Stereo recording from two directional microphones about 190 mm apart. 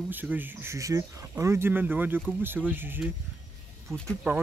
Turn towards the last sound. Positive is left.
turn(degrees=-10)  # may be behind; listen again after turning